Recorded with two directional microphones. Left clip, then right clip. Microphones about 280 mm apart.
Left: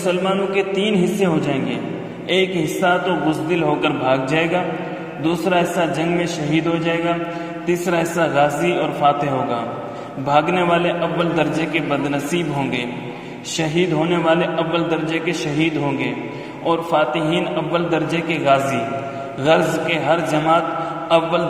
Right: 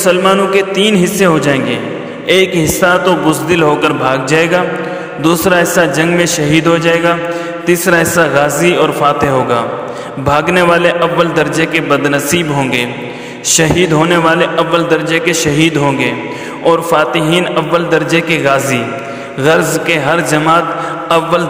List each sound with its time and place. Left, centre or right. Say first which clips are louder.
0.0 s a man's voice: right 10 dB; right